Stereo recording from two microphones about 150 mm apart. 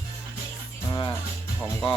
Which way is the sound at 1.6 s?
30° left (ahead or behind).